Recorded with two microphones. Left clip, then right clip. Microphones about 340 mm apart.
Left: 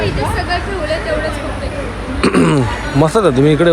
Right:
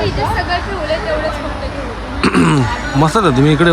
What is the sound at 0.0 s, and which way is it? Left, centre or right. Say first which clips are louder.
Vehicle: right 1 dB; right.